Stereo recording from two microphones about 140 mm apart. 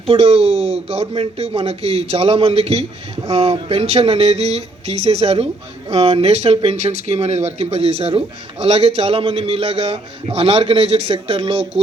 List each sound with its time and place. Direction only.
0.1 s speech: 45° right (ahead or behind)